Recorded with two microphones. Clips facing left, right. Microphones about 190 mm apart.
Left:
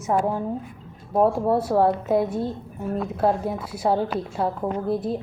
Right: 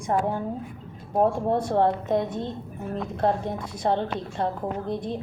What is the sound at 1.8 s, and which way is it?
A woman's voice, 5° left (ahead or behind).